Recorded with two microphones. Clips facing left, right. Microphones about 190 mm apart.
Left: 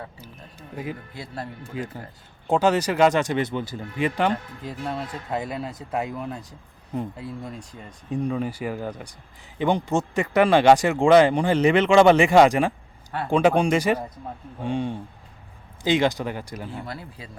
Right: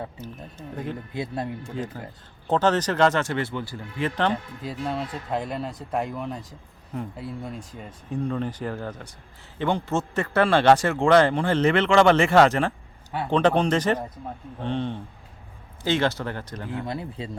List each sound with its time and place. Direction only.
0.2 s speech: 10° left (ahead or behind)
1.1 s speech: 20° right (ahead or behind)
1.7 s speech: 10° left (ahead or behind)
4.6 s speech: centre (ahead or behind)
8.1 s speech: 10° left (ahead or behind)
16.8 s speech: 20° right (ahead or behind)